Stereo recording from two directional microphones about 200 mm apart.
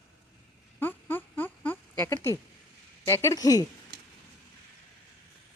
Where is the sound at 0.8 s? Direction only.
10° left (ahead or behind).